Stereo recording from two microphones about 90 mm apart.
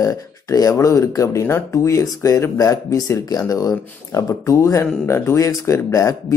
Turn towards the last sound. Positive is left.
turn(degrees=35)  # may be behind; listen again after turning